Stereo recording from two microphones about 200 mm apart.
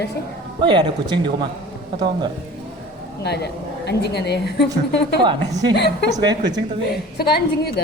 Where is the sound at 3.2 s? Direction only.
55° left (ahead or behind).